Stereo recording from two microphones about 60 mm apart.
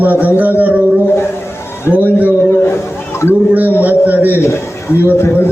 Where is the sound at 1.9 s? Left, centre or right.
Left.